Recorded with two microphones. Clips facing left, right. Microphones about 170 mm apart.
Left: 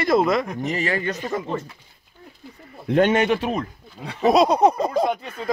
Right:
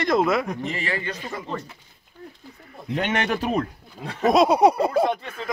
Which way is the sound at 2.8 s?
55° left (ahead or behind).